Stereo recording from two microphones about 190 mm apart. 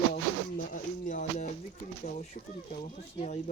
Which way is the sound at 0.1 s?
45° left (ahead or behind).